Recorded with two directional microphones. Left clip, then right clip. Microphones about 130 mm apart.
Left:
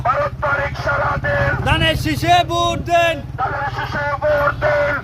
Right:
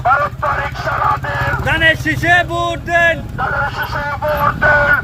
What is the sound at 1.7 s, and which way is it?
Speech, 35° left (ahead or behind).